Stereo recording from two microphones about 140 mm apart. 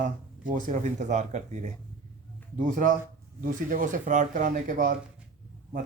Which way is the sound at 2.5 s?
65° right (ahead or behind).